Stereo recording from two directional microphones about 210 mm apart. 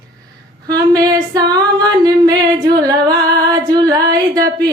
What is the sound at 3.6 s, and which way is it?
Music, 20° right (ahead or behind).